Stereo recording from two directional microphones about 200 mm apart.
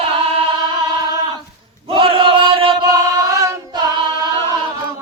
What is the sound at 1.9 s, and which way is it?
Chant, 25° right (ahead or behind).